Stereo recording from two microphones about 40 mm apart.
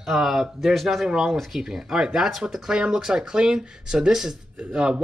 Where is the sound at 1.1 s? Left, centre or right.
Centre.